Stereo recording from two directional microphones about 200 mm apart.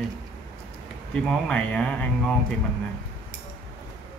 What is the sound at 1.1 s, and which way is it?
Speech, 5° left (ahead or behind).